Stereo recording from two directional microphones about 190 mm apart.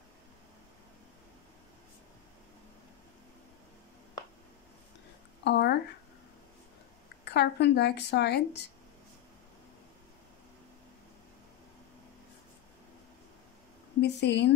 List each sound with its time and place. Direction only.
5.4 s a sound: 65° left (ahead or behind)
7.2 s a woman's voice: 65° left (ahead or behind)
14.0 s a woman's voice: 65° left (ahead or behind)